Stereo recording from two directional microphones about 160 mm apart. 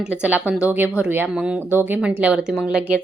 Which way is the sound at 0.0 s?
10° right (ahead or behind).